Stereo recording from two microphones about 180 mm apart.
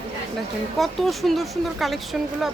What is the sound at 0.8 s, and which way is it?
Speech, centre (ahead or behind).